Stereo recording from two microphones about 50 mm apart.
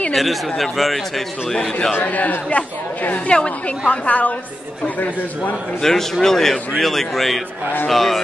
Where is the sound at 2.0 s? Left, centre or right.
Left.